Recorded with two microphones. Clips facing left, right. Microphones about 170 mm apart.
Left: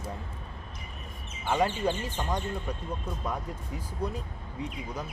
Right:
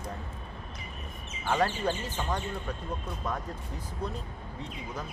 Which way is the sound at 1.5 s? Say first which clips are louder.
Left 1 dB; 10° left (ahead or behind).